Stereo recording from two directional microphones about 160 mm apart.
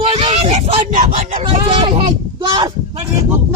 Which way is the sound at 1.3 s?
35° right (ahead or behind).